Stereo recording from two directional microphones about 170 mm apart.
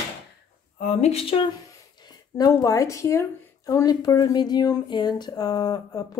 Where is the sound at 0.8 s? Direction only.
40° left (ahead or behind).